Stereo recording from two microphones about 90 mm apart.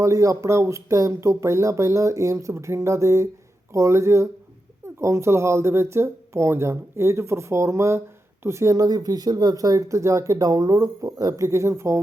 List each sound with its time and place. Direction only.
0.0 s speech: 35° right (ahead or behind)